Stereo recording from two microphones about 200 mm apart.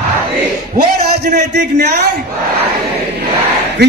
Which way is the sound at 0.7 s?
50° right (ahead or behind).